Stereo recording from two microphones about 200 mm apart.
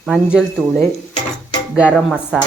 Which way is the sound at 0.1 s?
5° right (ahead or behind).